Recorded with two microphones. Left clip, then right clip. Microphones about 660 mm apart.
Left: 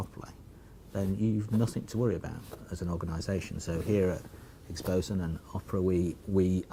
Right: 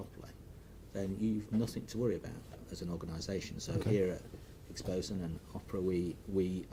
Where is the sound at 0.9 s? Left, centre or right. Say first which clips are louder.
Left 5 dB; left.